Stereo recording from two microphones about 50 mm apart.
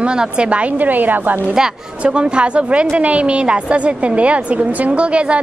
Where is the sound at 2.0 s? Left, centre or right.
Right.